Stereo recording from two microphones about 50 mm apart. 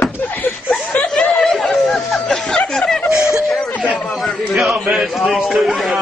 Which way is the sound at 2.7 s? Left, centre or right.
Centre.